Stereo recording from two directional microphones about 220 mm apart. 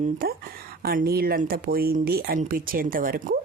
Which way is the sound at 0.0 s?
40° right (ahead or behind).